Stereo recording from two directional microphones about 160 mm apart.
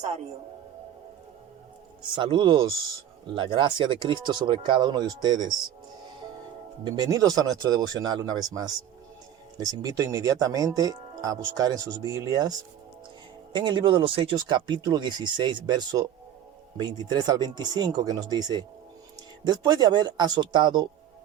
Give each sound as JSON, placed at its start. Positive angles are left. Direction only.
{"t": 0.0, "sound": "a man's voice", "side_deg": -45}
{"t": 2.1, "sound": "speech", "side_deg": -30}
{"t": 6.8, "sound": "speech", "side_deg": -25}